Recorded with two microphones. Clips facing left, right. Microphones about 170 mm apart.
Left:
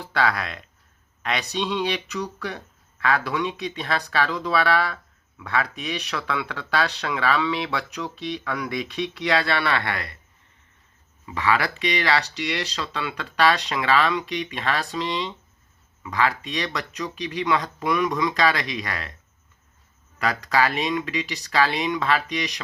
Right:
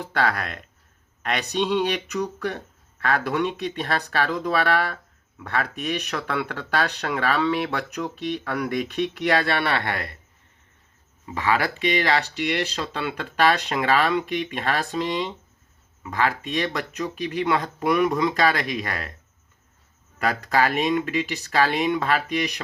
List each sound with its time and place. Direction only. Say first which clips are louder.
0.0 s speech: even; 45° right (ahead or behind)
11.3 s speech: even; 45° right (ahead or behind)
20.1 s speech: even; 45° right (ahead or behind)